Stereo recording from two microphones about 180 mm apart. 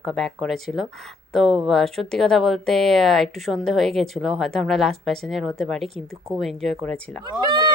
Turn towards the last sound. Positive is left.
turn(degrees=-25)  # may be behind; listen again after turning